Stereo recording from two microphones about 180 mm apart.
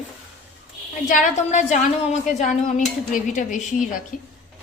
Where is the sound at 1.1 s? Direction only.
45° left (ahead or behind).